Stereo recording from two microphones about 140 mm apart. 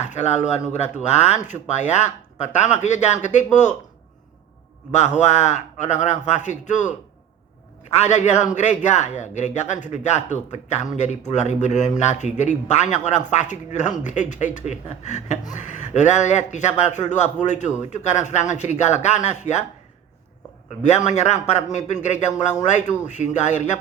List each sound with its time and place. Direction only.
0.0 s speech: 55° left (ahead or behind)
4.9 s speech: 55° left (ahead or behind)
20.7 s speech: 55° left (ahead or behind)